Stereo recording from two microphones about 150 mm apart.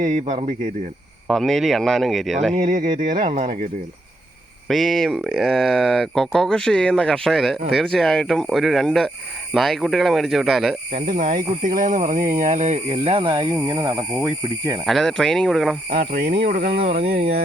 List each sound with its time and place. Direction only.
0.0 s speech: 55° right (ahead or behind)
1.3 s speech: centre (ahead or behind)
2.6 s speech: 55° right (ahead or behind)
3.2 s speech: 35° right (ahead or behind)
4.7 s speech: centre (ahead or behind)
10.9 s speech: 75° right (ahead or behind); by 12.8 s 50° right (ahead or behind)
12.9 s speech: 35° right (ahead or behind)
14.8 s speech: centre (ahead or behind)
15.9 s speech: 70° right (ahead or behind); by 16.8 s 90° right